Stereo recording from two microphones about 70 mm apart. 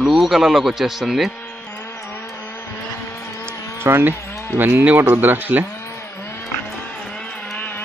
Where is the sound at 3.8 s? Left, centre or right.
Right.